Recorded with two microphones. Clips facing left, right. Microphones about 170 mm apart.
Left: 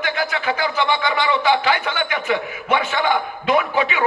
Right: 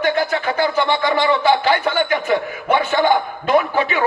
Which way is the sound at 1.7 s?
35° right (ahead or behind).